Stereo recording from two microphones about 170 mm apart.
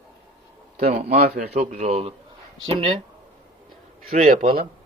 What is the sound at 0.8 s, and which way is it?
Speech, 40° right (ahead or behind).